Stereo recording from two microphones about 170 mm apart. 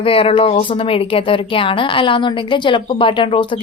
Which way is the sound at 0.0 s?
35° left (ahead or behind).